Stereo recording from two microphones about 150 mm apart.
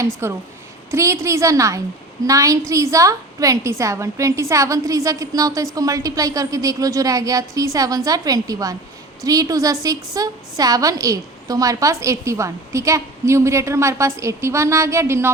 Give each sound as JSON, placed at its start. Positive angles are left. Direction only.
{"t": 0.0, "sound": "a woman's voice", "side_deg": -15}